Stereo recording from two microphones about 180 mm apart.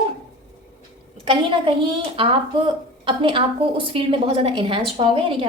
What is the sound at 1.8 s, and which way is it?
A woman's voice, 30° right (ahead or behind).